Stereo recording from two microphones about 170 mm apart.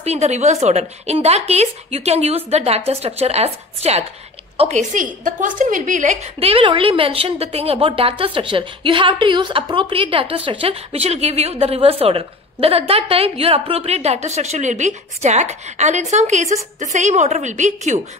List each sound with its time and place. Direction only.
0.0 s a woman's voice: 40° right (ahead or behind)
6.4 s a woman's voice: 30° right (ahead or behind)